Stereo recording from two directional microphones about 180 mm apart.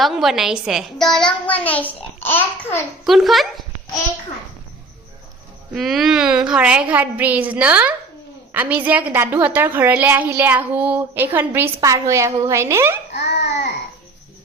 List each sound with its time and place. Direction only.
0.0 s a child's voice: centre (ahead or behind)
3.0 s a child's voice: centre (ahead or behind)
5.7 s a woman's voice: centre (ahead or behind)
13.1 s baby cry: 65° left (ahead or behind)